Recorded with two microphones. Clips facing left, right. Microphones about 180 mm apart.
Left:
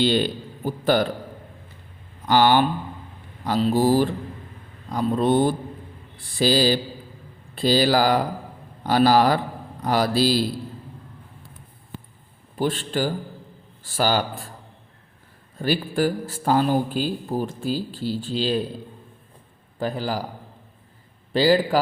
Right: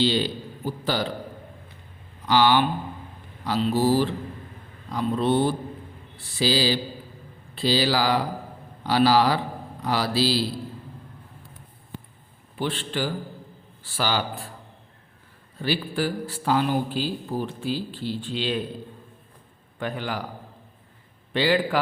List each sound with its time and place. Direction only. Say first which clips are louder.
0.0 s a man's voice: left 2 dB; 50° left (ahead or behind)
2.2 s a man's voice: left 2 dB; 50° left (ahead or behind)
12.5 s a man's voice: left 4 dB; 45° left (ahead or behind)
15.5 s a man's voice: left 3 dB; 45° left (ahead or behind)
19.8 s speech: left 4 dB; 35° left (ahead or behind)
21.3 s speech: left 4 dB; 40° left (ahead or behind)